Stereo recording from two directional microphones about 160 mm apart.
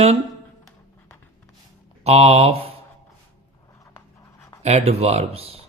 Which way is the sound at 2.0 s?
40° right (ahead or behind).